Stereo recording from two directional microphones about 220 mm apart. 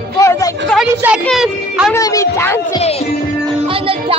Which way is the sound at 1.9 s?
15° left (ahead or behind).